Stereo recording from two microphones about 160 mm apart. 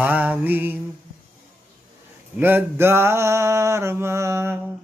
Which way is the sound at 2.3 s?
15° right (ahead or behind).